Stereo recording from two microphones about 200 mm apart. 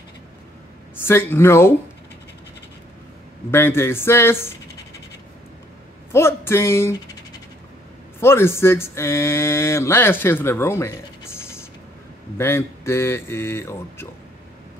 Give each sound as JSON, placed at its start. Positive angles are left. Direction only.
{"t": 1.0, "sound": "speech", "side_deg": 10}
{"t": 3.5, "sound": "speech", "side_deg": 10}
{"t": 6.1, "sound": "speech", "side_deg": 10}
{"t": 8.2, "sound": "speech", "side_deg": 10}
{"t": 12.4, "sound": "speech", "side_deg": 15}